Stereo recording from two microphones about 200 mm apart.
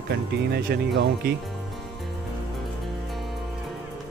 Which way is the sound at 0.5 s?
50° right (ahead or behind).